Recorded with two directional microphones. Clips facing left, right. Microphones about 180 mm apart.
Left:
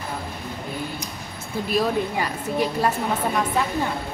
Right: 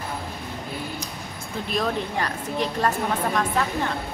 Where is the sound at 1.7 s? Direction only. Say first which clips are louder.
Left 3 dB; 10° left (ahead or behind).